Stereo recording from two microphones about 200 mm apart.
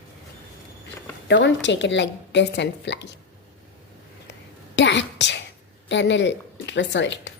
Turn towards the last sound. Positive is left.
turn(degrees=65)  # may be behind; listen again after turning